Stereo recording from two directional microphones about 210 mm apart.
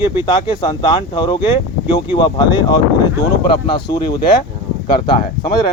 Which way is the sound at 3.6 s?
20° left (ahead or behind).